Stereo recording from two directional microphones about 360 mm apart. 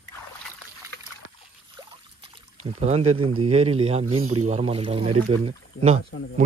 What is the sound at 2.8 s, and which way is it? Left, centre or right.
Speech, centre.